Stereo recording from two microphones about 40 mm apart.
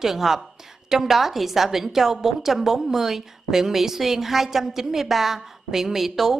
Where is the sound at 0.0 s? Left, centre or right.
Centre.